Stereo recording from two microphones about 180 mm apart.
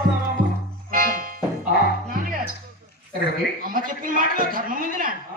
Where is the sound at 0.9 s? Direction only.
50° right (ahead or behind).